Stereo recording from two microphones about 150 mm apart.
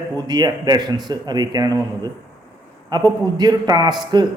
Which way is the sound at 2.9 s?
25° right (ahead or behind).